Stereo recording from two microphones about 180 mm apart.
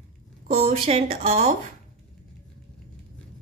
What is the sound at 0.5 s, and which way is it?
Speech, 35° right (ahead or behind).